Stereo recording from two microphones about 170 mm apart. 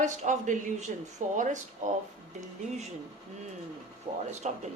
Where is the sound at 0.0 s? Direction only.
45° right (ahead or behind).